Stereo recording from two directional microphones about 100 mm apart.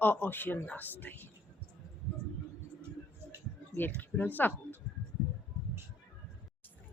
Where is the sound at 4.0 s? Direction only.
20° left (ahead or behind).